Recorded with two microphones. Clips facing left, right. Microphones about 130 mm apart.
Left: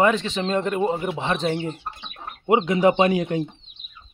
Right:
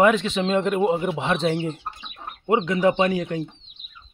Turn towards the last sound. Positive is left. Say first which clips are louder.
# left 2 dB
turn(degrees=20)  # may be behind; listen again after turning